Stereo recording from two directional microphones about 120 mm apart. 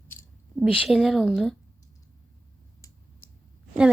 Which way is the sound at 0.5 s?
10° right (ahead or behind).